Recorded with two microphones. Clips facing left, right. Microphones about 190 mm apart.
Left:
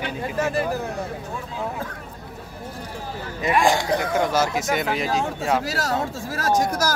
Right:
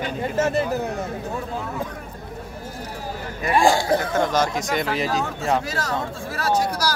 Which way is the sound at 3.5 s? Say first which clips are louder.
Right 2 dB; 30° right (ahead or behind).